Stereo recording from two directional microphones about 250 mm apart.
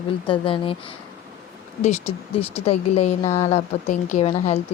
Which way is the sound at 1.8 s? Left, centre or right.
Left.